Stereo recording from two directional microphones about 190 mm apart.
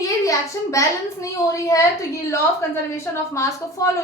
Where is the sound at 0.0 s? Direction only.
15° left (ahead or behind).